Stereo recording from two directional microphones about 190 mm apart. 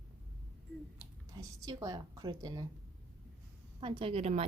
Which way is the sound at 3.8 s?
30° right (ahead or behind).